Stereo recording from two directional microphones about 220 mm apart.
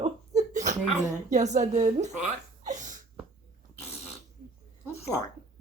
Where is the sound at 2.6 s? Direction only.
35° right (ahead or behind).